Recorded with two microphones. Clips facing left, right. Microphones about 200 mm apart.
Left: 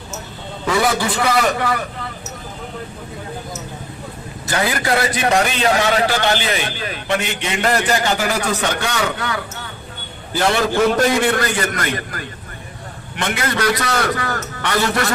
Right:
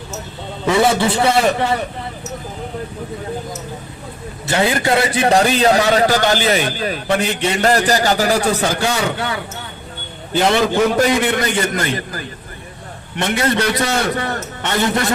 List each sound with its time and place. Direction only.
0.7 s a man's voice: 25° right (ahead or behind)
4.4 s a man's voice: 25° right (ahead or behind)
10.3 s a man's voice: 15° right (ahead or behind)
13.2 s a man's voice: 25° right (ahead or behind)